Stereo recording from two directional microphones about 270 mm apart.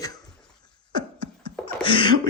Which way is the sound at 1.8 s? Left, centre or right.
Centre.